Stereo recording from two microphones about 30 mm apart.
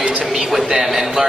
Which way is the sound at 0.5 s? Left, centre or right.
Centre.